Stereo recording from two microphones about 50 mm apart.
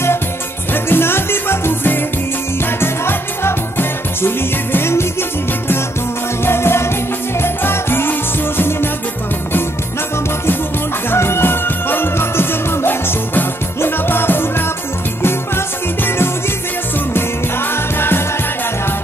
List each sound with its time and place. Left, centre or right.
0.8 s music: left
6.4 s music: left
11.1 s music: left
17.9 s music: left